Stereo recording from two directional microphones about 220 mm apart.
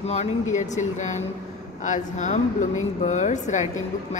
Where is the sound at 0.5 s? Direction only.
35° left (ahead or behind).